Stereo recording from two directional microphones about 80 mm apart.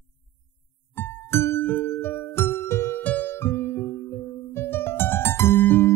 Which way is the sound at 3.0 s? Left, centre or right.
Left.